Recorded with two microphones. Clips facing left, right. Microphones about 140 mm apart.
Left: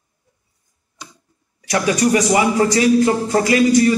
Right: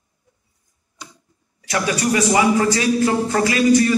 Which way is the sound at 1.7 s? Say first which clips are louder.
Left 4 dB; 25° left (ahead or behind).